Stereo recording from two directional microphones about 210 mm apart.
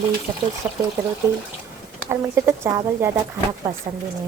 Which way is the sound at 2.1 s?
15° right (ahead or behind).